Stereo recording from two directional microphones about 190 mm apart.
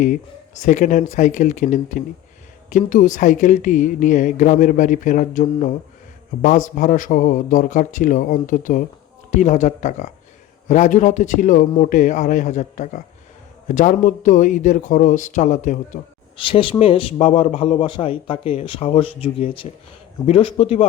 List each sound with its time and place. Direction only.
0.0 s a man's voice: 40° left (ahead or behind)
16.4 s speech: 25° left (ahead or behind)